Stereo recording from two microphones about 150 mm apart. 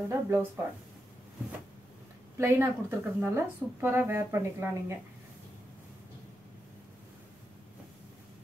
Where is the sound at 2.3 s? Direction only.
15° right (ahead or behind).